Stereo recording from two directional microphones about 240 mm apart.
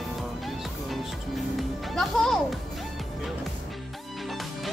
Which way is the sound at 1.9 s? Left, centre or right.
Centre.